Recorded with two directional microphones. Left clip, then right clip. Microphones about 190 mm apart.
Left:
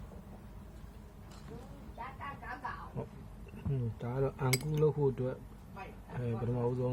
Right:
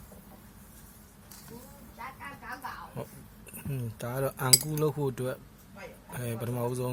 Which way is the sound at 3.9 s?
35° right (ahead or behind).